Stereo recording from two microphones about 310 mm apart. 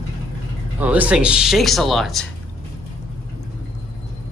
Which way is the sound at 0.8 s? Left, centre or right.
Centre.